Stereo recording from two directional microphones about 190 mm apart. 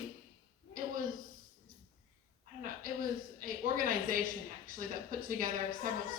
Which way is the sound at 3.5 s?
45° right (ahead or behind).